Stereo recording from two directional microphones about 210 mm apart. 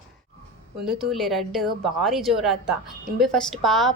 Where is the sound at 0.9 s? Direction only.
Centre (ahead or behind).